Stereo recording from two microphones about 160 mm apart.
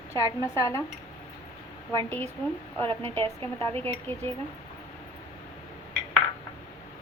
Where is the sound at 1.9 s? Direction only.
15° left (ahead or behind).